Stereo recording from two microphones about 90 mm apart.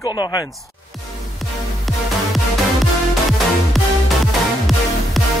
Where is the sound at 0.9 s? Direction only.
Centre (ahead or behind).